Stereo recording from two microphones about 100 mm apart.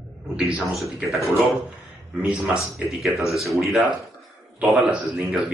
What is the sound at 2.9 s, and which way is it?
Speech, centre (ahead or behind).